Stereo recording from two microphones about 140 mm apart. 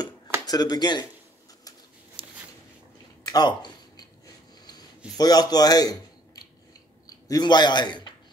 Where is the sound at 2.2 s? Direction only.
40° right (ahead or behind).